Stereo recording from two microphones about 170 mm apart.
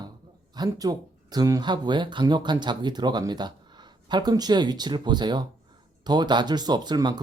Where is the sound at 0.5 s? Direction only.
25° right (ahead or behind).